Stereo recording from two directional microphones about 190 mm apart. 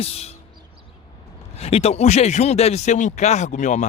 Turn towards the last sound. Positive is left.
turn(degrees=40)  # may be behind; listen again after turning